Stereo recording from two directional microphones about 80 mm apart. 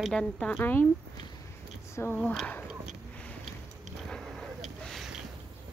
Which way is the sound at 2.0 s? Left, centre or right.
Left.